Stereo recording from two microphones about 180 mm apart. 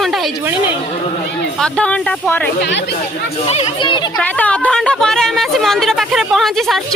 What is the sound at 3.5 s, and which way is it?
Speech, 35° left (ahead or behind).